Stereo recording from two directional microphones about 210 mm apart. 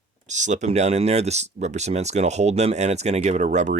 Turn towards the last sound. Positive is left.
turn(degrees=-35)  # may be behind; listen again after turning